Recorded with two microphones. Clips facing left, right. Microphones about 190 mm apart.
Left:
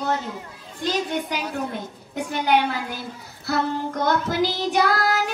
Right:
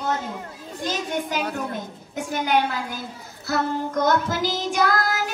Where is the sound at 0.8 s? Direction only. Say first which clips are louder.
Left 2 dB; 45° right (ahead or behind).